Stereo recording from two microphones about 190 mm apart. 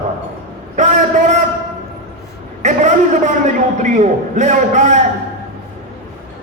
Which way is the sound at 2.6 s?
40° right (ahead or behind).